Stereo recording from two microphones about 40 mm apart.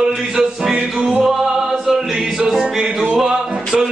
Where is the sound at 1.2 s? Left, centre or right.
Centre.